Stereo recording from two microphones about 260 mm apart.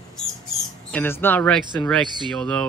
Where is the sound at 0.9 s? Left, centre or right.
Centre.